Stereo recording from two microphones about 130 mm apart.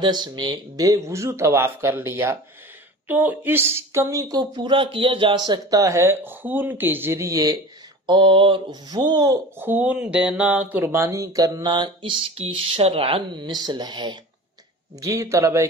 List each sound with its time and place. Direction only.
0.0 s speech: 35° right (ahead or behind)
8.1 s speech: 40° right (ahead or behind)
9.6 s speech: 15° right (ahead or behind); by 14.1 s 35° right (ahead or behind)
15.0 s speech: 25° right (ahead or behind)